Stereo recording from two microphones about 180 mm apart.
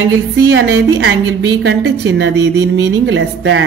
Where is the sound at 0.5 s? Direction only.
90° right.